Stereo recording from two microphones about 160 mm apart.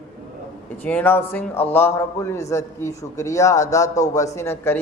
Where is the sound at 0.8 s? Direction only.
10° left (ahead or behind).